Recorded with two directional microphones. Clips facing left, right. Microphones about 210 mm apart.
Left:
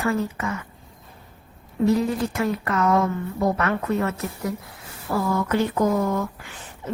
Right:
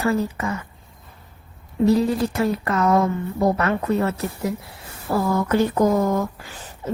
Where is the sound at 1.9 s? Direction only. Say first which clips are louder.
Right 3 dB; 35° right (ahead or behind).